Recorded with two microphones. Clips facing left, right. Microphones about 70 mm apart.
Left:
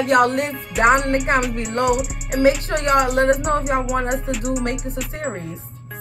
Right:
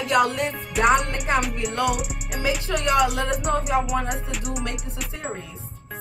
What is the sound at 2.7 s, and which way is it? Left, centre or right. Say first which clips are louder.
Speech: left 3 dB; left.